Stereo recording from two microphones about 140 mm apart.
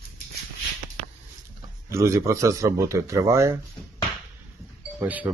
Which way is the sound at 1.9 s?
20° right (ahead or behind).